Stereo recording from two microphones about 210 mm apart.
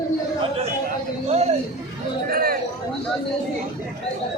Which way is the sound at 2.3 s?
45° right (ahead or behind).